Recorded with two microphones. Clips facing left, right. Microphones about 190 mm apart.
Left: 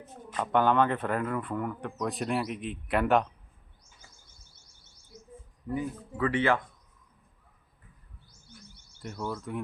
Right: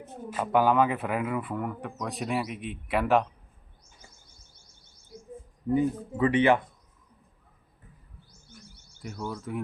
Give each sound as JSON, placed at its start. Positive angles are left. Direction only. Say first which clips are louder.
{"t": 0.3, "sound": "speech", "louder": "right 2 dB", "side_deg": -5}
{"t": 5.6, "sound": "speech", "louder": "right 8 dB", "side_deg": -25}
{"t": 9.0, "sound": "speech", "louder": "even", "side_deg": -5}